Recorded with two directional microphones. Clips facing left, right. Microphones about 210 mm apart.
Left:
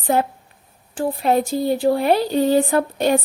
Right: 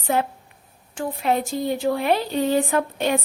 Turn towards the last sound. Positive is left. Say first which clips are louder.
# left 4 dB
turn(degrees=35)  # may be behind; listen again after turning